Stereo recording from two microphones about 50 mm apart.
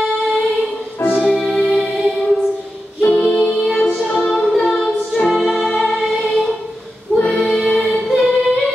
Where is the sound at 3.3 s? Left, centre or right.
Centre.